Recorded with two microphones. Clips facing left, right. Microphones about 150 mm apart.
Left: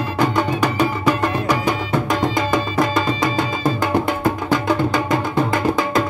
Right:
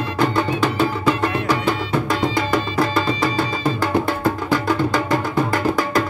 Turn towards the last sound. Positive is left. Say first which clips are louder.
# left 1 dB
turn(degrees=20)  # may be behind; listen again after turning